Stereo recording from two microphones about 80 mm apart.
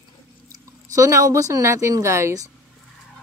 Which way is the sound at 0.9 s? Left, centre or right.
Right.